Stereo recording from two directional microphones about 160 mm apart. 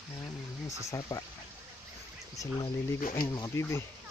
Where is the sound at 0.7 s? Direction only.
20° left (ahead or behind).